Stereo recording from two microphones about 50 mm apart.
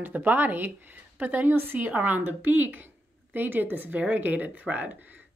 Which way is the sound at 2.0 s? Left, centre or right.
Right.